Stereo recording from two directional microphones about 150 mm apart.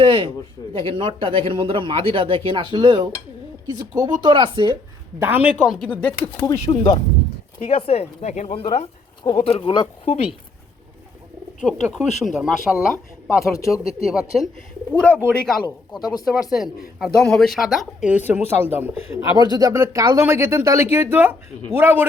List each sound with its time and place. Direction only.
0.0 s a sound: 35° right (ahead or behind)
0.9 s speech: 35° right (ahead or behind)
5.2 s speech: 10° right (ahead or behind)
5.6 s speech: centre (ahead or behind); by 7.0 s 30° left (ahead or behind)
7.6 s speech: 40° left (ahead or behind)
11.6 s speech: centre (ahead or behind)
13.4 s speech: 20° left (ahead or behind)
14.1 s speech: 5° right (ahead or behind)
14.9 s speech: 10° left (ahead or behind)
16.3 s speech: centre (ahead or behind)
18.9 s speech: 40° left (ahead or behind)
19.2 s speech: 25° right (ahead or behind)